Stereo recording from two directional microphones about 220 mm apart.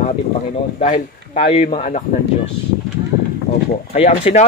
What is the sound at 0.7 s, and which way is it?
Speech, 30° left (ahead or behind).